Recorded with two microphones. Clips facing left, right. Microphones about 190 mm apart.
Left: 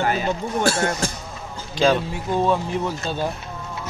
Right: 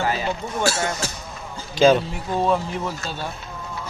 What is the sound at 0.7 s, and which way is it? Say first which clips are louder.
Speech: left 2 dB; 50° left (ahead or behind).